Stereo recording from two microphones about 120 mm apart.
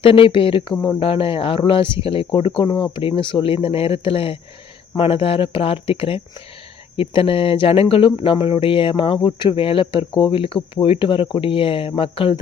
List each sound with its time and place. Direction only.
0.0 s speech: 50° left (ahead or behind)